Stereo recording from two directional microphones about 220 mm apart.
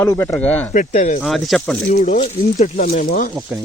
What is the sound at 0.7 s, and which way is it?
Speech, 35° left (ahead or behind).